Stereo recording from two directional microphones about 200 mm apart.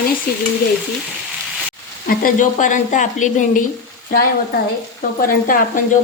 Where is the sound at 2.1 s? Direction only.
45° left (ahead or behind).